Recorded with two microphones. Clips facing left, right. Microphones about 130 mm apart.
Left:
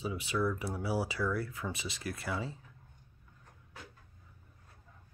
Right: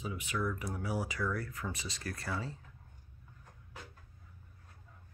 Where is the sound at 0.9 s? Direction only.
30° left (ahead or behind).